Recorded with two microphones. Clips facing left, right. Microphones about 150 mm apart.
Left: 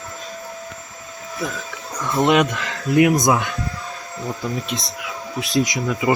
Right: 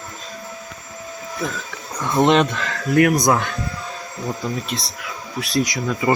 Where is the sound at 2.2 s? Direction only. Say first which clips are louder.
Right 1 dB; 10° left (ahead or behind).